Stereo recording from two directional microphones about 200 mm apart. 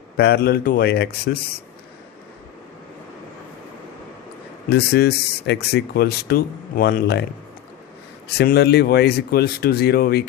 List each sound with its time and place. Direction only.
0.2 s speech: 50° left (ahead or behind)
4.7 s speech: 55° left (ahead or behind)
8.3 s speech: 55° left (ahead or behind)